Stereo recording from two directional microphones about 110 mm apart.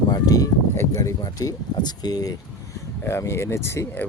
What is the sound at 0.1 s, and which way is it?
Speech, 35° left (ahead or behind).